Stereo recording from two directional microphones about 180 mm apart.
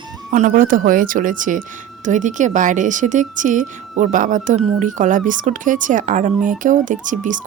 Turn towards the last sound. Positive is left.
turn(degrees=-45)  # may be behind; listen again after turning